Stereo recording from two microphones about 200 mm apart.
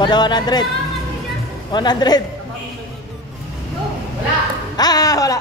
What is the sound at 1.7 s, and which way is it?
Speech, 20° left (ahead or behind).